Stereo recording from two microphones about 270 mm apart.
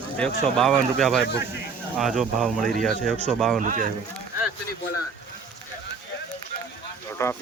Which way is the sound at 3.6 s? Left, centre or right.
Right.